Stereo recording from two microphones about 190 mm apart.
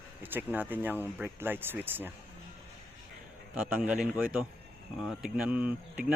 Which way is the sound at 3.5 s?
5° right (ahead or behind).